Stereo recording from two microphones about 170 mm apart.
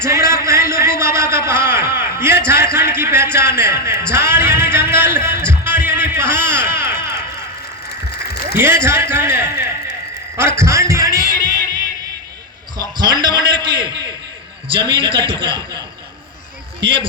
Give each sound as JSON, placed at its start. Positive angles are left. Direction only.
{"t": 0.0, "sound": "a sound", "side_deg": -15}
{"t": 8.5, "sound": "a man's voice", "side_deg": -15}
{"t": 10.3, "sound": "music", "side_deg": -15}
{"t": 11.3, "sound": "a sound", "side_deg": -25}
{"t": 14.7, "sound": "a man's voice", "side_deg": -30}
{"t": 16.8, "sound": "a man's voice", "side_deg": -30}